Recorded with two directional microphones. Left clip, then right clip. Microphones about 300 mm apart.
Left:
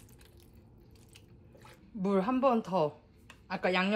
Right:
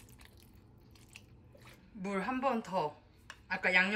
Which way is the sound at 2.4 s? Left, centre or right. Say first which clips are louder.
Left 4 dB; centre.